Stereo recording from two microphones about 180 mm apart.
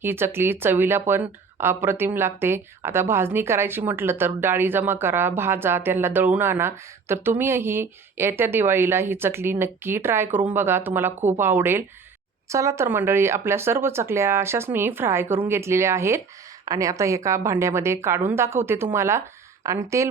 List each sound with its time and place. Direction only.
0.0 s speech: 10° right (ahead or behind)